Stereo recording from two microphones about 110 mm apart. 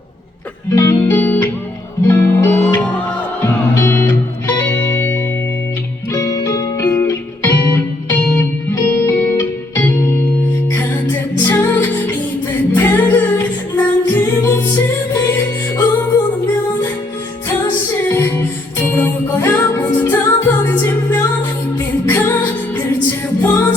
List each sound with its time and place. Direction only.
0.8 s music: 20° left (ahead or behind)
12.7 s singing: 20° left (ahead or behind)
18.1 s music: 25° left (ahead or behind)
23.4 s music: 20° left (ahead or behind)